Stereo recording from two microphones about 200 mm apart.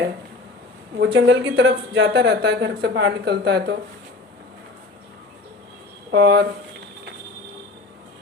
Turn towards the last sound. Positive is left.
turn(degrees=-60)  # may be behind; listen again after turning